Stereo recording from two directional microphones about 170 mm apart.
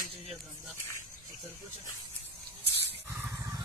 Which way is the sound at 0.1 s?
35° right (ahead or behind).